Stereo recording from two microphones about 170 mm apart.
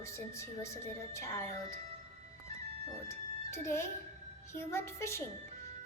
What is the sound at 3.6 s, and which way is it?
A woman's voice, 15° left (ahead or behind).